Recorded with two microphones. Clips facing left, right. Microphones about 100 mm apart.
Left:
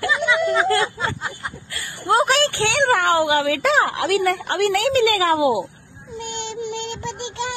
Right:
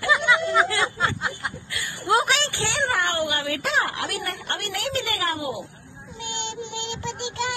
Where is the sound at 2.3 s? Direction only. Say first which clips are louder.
Left 6 dB; 50° left (ahead or behind); by 5.6 s 90° left.